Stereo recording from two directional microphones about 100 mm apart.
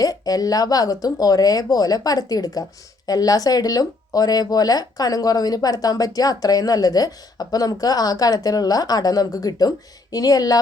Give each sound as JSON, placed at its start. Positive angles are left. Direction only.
{"t": 0.0, "sound": "speech", "side_deg": 40}